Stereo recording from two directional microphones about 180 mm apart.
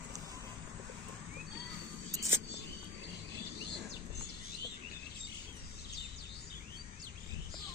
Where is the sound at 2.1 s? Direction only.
20° right (ahead or behind).